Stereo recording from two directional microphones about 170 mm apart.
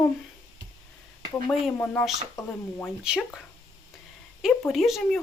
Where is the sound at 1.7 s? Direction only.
15° left (ahead or behind).